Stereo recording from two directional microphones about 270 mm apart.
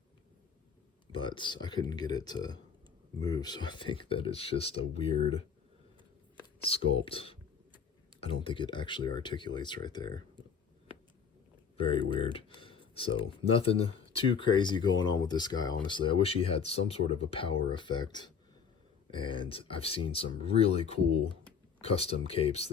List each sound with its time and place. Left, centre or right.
1.1 s speech: centre
6.7 s speech: left
12.1 s speech: centre